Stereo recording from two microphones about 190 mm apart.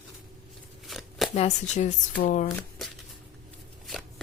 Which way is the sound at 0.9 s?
Centre (ahead or behind).